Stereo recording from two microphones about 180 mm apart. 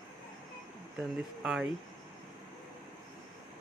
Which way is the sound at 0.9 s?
5° right (ahead or behind).